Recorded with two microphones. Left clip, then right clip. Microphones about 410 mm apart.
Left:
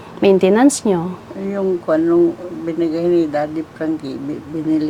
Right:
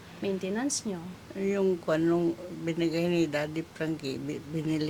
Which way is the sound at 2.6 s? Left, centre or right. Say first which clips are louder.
Left 11 dB; right.